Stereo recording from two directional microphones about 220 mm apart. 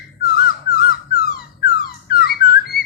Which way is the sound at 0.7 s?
45° left (ahead or behind).